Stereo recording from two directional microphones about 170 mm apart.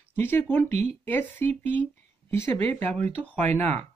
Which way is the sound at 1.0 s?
15° left (ahead or behind).